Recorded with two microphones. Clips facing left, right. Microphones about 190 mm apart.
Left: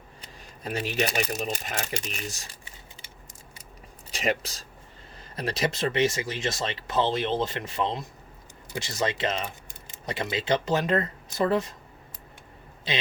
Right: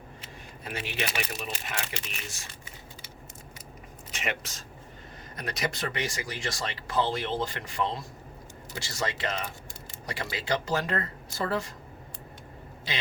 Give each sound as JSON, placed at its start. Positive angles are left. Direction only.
{"t": 0.2, "sound": "speech", "side_deg": 40}
{"t": 4.1, "sound": "speech", "side_deg": 35}
{"t": 12.9, "sound": "speech", "side_deg": 20}